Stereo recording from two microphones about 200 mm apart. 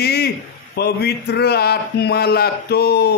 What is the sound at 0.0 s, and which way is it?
A man's voice, 55° left (ahead or behind).